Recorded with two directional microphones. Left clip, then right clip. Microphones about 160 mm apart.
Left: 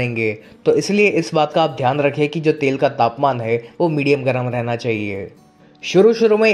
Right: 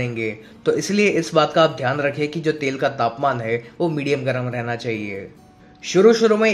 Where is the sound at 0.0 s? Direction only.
35° left (ahead or behind).